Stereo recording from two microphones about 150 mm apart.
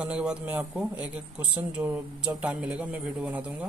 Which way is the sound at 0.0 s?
5° right (ahead or behind).